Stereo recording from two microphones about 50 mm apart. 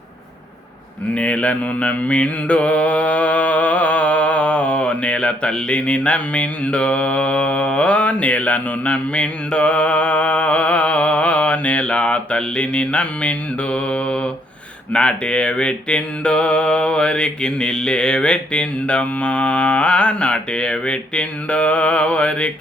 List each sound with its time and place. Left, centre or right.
1.1 s mantra: left